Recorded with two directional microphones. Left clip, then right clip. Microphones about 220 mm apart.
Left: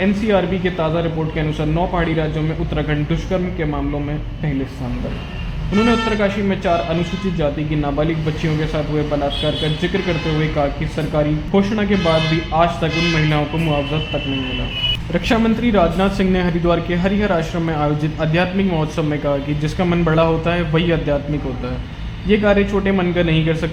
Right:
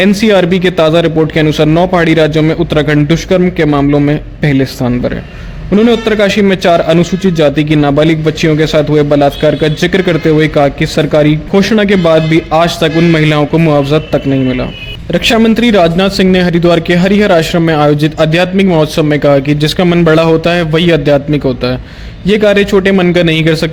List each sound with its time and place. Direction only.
0.0 s a man's voice: 55° right (ahead or behind)
5.9 s a man's voice: 55° right (ahead or behind)
15.1 s a man's voice: 35° right (ahead or behind)
22.3 s a man's voice: 45° right (ahead or behind)